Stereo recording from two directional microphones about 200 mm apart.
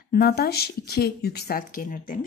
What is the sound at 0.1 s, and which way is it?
Speech, 50° left (ahead or behind).